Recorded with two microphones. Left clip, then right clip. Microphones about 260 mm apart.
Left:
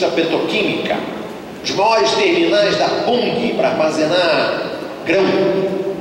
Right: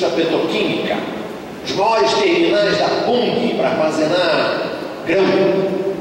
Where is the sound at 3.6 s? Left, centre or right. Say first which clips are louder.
Left 3 dB; centre.